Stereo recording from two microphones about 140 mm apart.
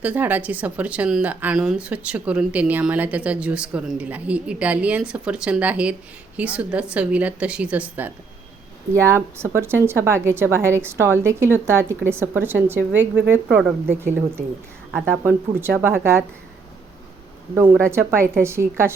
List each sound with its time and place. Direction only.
0.0 s a woman's voice: 10° right (ahead or behind)
13.6 s speech: 5° right (ahead or behind)
14.0 s a woman's voice: 15° right (ahead or behind)
17.8 s a woman's voice: 20° right (ahead or behind)